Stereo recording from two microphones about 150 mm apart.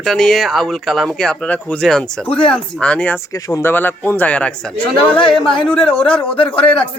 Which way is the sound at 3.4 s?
25° left (ahead or behind).